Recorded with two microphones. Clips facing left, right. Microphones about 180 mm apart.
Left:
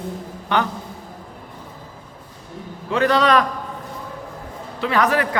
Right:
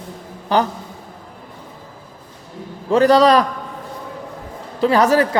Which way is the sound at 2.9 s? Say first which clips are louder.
Right 5 dB; 35° right (ahead or behind).